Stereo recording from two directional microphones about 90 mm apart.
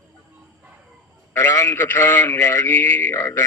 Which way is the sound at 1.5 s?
30° left (ahead or behind).